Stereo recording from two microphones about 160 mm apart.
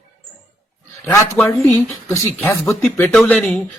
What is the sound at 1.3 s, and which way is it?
Speech, 10° left (ahead or behind).